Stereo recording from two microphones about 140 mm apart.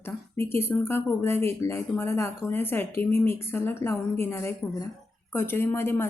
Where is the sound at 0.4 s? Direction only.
15° left (ahead or behind).